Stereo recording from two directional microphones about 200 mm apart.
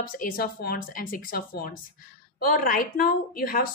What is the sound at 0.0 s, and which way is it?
A woman's voice, 45° left (ahead or behind).